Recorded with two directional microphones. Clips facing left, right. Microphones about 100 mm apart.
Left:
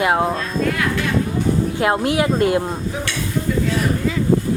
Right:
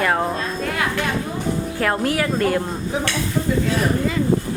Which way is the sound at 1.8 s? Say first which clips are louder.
Left 2 dB; 20° left (ahead or behind).